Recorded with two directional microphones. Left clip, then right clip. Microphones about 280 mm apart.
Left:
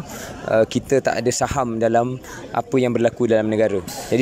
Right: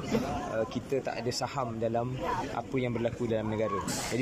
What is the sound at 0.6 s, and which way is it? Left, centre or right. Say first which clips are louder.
Speech: left 17 dB; left.